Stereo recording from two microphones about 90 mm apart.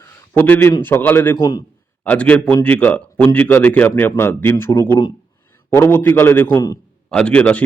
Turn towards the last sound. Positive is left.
turn(degrees=15)  # may be behind; listen again after turning